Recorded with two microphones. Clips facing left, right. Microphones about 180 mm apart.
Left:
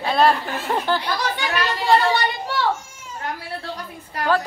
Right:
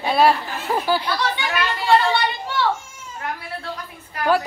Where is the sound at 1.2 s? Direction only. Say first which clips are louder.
Even; 40° left (ahead or behind).